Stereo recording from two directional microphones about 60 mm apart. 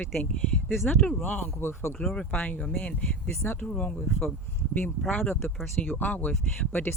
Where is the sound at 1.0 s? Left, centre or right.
Left.